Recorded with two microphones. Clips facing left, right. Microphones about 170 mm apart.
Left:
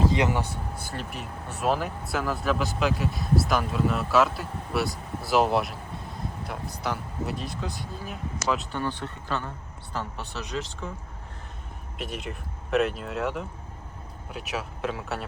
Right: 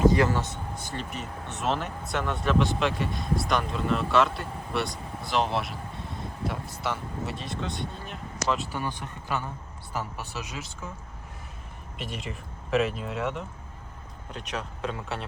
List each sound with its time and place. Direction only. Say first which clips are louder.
0.0 s a sound: right 2 dB; 20° left (ahead or behind)
0.8 s speech: even; 5° left (ahead or behind)
8.8 s speech: left 3 dB; 15° right (ahead or behind)
11.9 s speech: left 2 dB; centre (ahead or behind)